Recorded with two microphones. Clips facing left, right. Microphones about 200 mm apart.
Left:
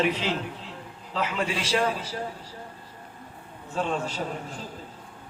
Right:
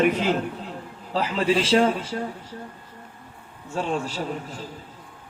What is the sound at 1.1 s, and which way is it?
Speech, 30° right (ahead or behind).